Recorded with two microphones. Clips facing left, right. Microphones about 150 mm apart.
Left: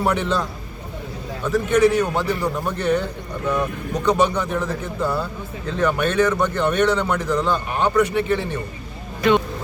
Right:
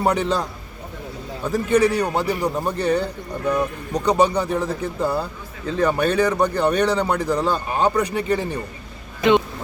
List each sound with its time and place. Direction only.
0.0 s a man's voice: 40° right (ahead or behind)
1.5 s a man's voice: 35° right (ahead or behind)
2.2 s speech: 15° right (ahead or behind)
2.6 s a man's voice: 35° right (ahead or behind)